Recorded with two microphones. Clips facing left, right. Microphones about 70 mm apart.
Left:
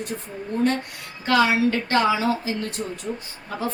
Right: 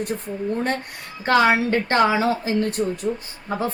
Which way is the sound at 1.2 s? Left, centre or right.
Right.